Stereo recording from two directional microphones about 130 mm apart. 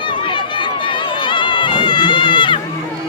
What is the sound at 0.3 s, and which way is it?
Run, 40° left (ahead or behind).